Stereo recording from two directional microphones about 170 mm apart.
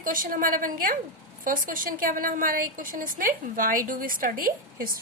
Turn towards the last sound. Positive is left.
turn(degrees=-55)  # may be behind; listen again after turning